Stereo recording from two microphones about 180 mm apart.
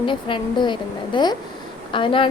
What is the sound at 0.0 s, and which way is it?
A woman's voice, 25° left (ahead or behind).